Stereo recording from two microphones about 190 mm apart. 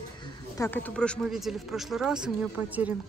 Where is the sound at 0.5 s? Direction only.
10° left (ahead or behind).